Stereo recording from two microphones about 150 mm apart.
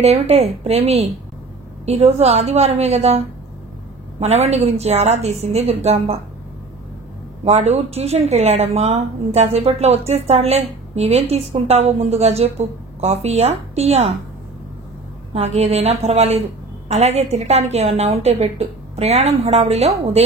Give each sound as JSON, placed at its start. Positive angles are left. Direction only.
{"t": 0.0, "sound": "speech", "side_deg": -45}
{"t": 7.4, "sound": "speech", "side_deg": -45}
{"t": 15.3, "sound": "speech", "side_deg": -45}